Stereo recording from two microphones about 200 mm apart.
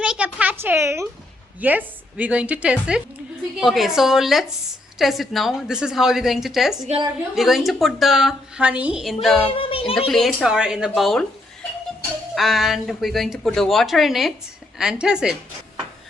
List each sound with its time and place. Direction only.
0.0 s a sound: 5° right (ahead or behind)
1.6 s a woman's voice: 10° right (ahead or behind)
9.4 s speech: 25° left (ahead or behind)
10.1 s speech: centre (ahead or behind)
12.3 s speech: centre (ahead or behind)